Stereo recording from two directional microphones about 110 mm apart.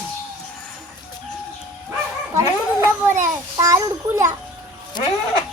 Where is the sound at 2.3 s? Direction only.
25° right (ahead or behind).